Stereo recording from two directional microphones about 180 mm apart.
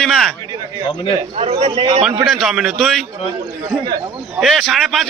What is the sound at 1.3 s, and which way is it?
Speech, 30° right (ahead or behind).